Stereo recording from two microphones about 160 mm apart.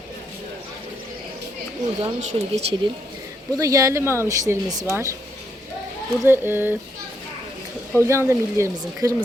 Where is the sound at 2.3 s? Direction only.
35° right (ahead or behind).